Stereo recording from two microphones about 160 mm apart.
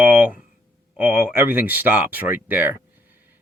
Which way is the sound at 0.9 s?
15° right (ahead or behind).